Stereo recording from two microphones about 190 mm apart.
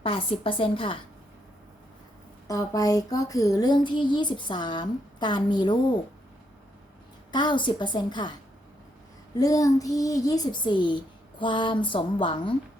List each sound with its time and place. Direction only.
0.0 s speech: 30° left (ahead or behind)
2.5 s speech: 20° left (ahead or behind)
7.3 s speech: 25° left (ahead or behind)
9.4 s a child's voice: 20° left (ahead or behind)